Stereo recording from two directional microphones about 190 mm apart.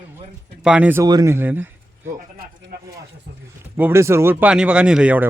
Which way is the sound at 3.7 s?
10° right (ahead or behind).